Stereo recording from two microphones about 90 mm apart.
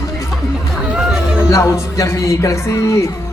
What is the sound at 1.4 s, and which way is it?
Music, 30° left (ahead or behind).